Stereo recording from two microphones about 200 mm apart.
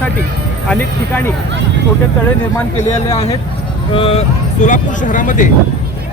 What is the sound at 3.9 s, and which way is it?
Speech, 30° left (ahead or behind).